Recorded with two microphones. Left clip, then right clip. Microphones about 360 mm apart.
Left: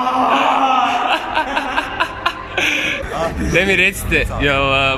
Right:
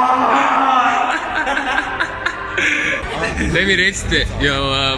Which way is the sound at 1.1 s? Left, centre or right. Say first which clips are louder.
Even; centre.